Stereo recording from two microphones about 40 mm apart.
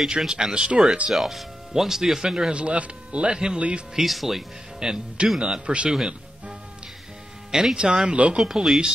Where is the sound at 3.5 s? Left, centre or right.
Right.